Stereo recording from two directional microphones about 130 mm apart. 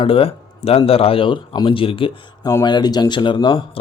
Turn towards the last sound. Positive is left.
turn(degrees=40)  # may be behind; listen again after turning